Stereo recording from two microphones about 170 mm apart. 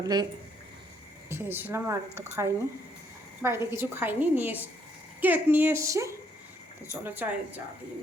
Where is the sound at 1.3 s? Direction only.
10° right (ahead or behind).